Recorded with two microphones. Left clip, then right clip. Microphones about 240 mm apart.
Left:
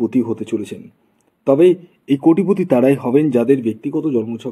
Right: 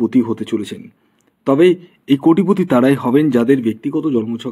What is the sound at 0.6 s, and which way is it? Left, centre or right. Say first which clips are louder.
A man's voice: right 1 dB; right.